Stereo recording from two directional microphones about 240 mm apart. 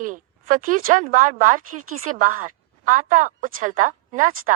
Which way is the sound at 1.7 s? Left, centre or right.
Right.